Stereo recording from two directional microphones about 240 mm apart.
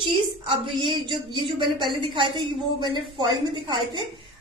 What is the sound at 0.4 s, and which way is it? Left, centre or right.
A woman's voice, centre.